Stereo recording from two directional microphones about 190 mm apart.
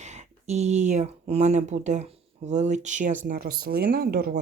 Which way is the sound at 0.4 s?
35° right (ahead or behind).